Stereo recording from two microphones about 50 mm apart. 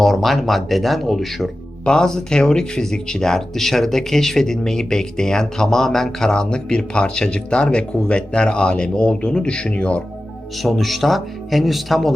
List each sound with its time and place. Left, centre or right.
0.0 s speech: centre
1.8 s speech: centre
10.6 s speech: centre